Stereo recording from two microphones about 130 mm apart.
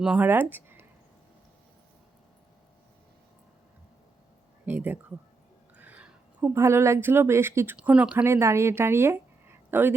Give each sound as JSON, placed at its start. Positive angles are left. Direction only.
{"t": 0.0, "sound": "speech", "side_deg": -10}
{"t": 4.6, "sound": "speech", "side_deg": -15}
{"t": 8.2, "sound": "speech", "side_deg": -20}